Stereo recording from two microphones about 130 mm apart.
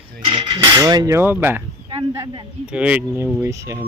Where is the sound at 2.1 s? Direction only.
30° right (ahead or behind).